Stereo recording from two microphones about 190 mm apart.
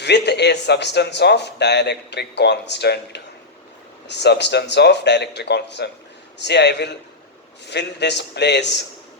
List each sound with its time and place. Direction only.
0.0 s speech: 65° left (ahead or behind)